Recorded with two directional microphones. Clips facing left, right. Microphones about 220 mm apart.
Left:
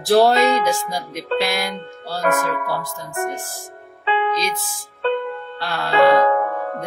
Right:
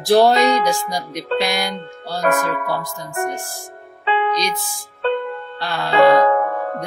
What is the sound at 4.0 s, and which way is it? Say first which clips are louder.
Music: right 1 dB; 45° right (ahead or behind).